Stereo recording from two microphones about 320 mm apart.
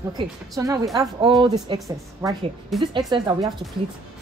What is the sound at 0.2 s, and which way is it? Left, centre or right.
A woman's voice, centre.